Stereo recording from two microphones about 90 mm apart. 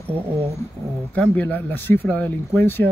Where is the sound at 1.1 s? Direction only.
15° left (ahead or behind).